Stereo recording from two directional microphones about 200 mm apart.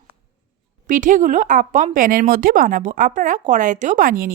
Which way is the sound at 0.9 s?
40° right (ahead or behind).